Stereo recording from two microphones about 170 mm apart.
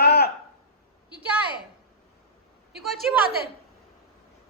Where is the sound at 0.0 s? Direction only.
70° left (ahead or behind).